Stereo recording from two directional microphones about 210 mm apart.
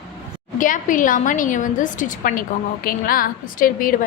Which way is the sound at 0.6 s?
40° left (ahead or behind).